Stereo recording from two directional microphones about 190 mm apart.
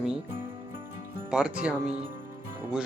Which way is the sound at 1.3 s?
5° right (ahead or behind).